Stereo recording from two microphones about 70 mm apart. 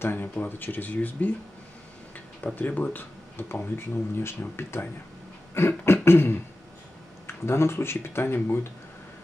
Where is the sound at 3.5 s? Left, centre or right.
Left.